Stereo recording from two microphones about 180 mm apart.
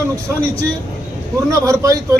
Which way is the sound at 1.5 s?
15° right (ahead or behind).